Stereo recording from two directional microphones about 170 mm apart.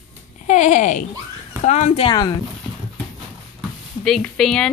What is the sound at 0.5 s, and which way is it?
Speech, 45° left (ahead or behind).